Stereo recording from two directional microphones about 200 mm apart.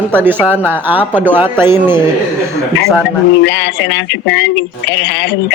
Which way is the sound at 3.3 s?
65° left (ahead or behind).